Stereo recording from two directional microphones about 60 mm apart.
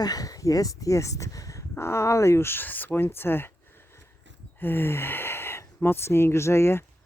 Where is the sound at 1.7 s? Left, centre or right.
Left.